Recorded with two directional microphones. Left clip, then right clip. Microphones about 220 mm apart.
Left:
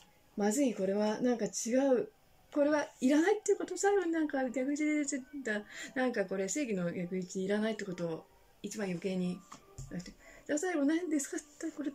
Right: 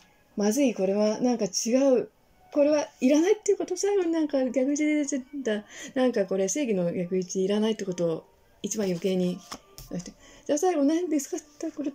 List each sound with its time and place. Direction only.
0.4 s a woman's voice: 10° right (ahead or behind)